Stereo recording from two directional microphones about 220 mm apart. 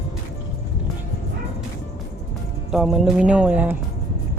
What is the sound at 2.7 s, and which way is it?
Speech, centre (ahead or behind).